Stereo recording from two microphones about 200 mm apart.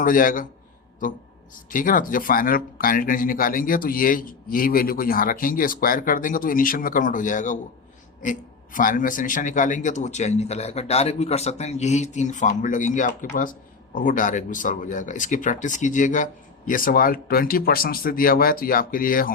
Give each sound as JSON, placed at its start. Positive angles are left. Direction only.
{"t": 0.0, "sound": "speech", "side_deg": 45}
{"t": 1.7, "sound": "a man's voice", "side_deg": 45}